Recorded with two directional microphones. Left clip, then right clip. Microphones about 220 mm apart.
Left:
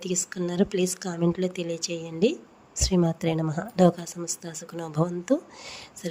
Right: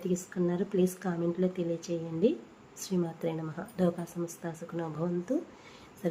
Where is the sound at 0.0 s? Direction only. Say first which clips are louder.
Left 2 dB; 45° left (ahead or behind).